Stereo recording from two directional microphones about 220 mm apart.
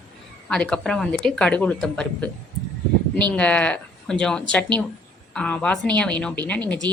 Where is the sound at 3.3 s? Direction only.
5° left (ahead or behind).